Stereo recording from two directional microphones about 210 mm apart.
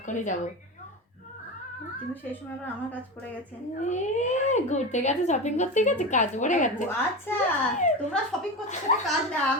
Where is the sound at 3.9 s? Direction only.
35° left (ahead or behind).